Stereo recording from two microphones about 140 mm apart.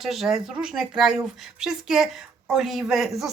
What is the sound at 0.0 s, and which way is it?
A woman's voice, centre (ahead or behind).